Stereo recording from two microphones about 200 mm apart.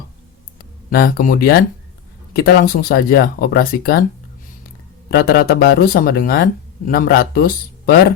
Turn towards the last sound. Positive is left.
turn(degrees=50)  # may be behind; listen again after turning